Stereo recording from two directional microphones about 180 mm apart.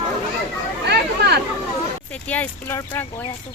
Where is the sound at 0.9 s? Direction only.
65° right (ahead or behind).